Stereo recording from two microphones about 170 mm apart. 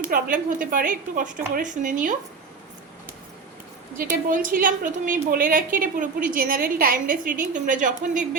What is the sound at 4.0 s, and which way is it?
A woman's voice, 50° right (ahead or behind).